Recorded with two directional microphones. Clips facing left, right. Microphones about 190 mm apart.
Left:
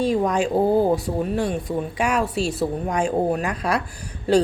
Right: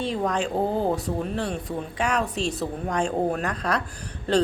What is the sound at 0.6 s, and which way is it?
Speech, 40° left (ahead or behind).